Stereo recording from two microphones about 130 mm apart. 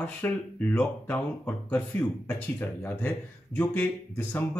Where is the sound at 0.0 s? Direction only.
10° left (ahead or behind).